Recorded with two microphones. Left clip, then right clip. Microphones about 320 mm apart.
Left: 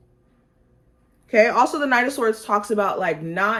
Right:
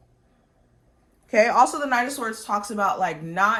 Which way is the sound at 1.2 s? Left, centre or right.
Right.